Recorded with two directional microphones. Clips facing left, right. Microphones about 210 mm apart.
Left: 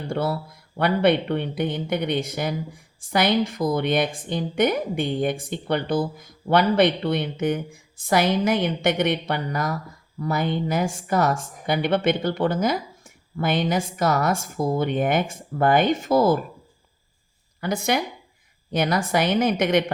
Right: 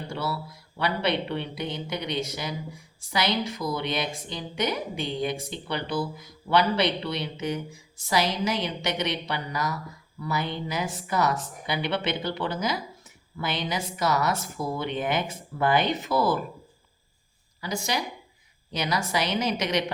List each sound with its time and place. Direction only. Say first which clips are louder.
0.1 s a woman's voice: left 8 dB; 50° left (ahead or behind)
17.6 s a woman's voice: left 6 dB; 55° left (ahead or behind)